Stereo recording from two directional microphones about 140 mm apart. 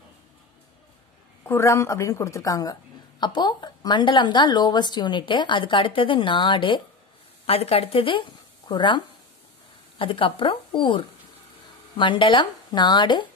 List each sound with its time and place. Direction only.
1.4 s a woman's voice: 20° left (ahead or behind); by 13.3 s 35° left (ahead or behind)